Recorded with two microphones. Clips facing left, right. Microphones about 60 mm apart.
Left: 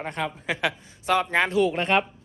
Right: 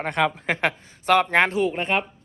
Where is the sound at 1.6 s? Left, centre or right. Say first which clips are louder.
Left 1 dB; centre.